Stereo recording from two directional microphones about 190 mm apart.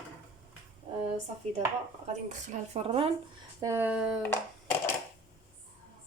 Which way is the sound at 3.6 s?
15° right (ahead or behind).